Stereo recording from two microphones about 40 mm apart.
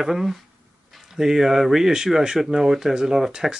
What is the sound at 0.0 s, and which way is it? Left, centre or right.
Speech, centre.